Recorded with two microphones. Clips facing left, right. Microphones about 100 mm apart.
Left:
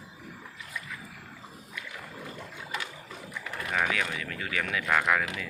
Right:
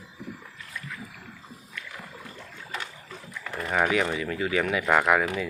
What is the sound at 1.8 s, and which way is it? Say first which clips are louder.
Rowboat: even; 15° left (ahead or behind).